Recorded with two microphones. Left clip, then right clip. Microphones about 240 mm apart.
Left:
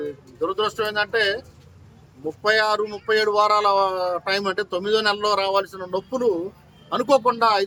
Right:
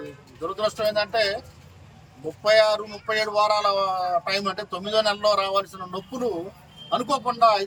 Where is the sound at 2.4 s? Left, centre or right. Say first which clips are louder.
Right 1 dB; centre.